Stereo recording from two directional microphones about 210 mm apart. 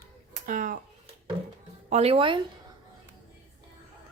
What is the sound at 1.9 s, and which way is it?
Speech, 30° right (ahead or behind).